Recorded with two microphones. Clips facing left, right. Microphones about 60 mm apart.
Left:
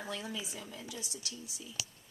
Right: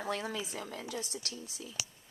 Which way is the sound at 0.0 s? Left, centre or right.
Right.